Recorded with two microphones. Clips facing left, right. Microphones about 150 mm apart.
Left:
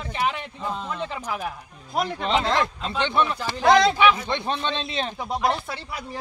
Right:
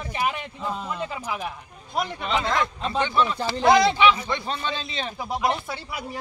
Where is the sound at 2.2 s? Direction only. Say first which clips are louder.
Left 2 dB; 30° left (ahead or behind).